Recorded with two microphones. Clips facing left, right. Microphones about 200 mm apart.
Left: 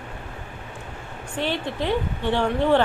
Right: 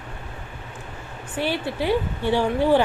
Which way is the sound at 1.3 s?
10° right (ahead or behind).